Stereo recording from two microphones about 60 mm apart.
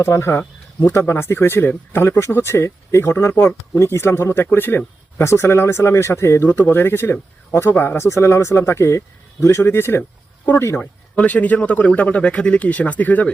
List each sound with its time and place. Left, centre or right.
0.0 s speech: left
2.0 s speech: left
2.3 s speech: left
5.1 s speech: left
6.5 s speech: left
10.0 s a sound: left
11.1 s speech: left